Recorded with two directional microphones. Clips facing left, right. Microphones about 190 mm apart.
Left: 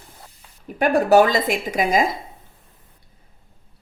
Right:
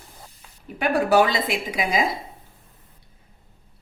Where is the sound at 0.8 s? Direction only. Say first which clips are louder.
Left 4 dB; 45° left (ahead or behind).